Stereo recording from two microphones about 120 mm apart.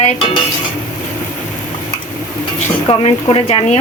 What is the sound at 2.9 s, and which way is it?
Speech, 50° left (ahead or behind).